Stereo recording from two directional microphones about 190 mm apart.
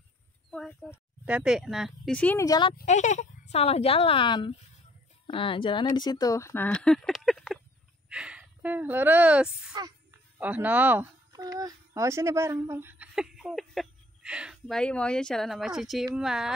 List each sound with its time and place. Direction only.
0.5 s speech: 5° left (ahead or behind); by 2.7 s 20° left (ahead or behind)
2.8 s speech: 40° left (ahead or behind); by 16.5 s 5° right (ahead or behind)